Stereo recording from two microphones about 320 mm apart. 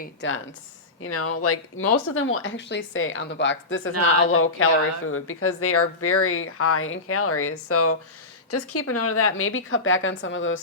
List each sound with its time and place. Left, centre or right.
0.0 s speech: left
1.0 s speech: left